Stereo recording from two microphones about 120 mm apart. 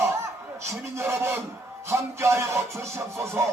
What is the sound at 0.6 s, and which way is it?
Speech, 20° right (ahead or behind).